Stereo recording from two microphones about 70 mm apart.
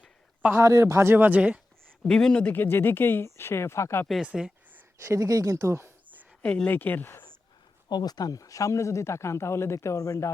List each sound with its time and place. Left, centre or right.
0.5 s speech: right
1.4 s speech: centre
2.0 s speech: centre
2.5 s speech: left
4.2 s speech: centre
5.0 s speech: right
6.4 s speech: centre
7.9 s speech: left